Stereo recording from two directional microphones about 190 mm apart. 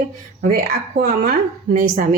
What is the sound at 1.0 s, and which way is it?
Speech, 50° right (ahead or behind).